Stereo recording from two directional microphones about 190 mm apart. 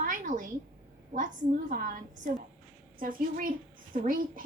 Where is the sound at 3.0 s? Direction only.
45° right (ahead or behind).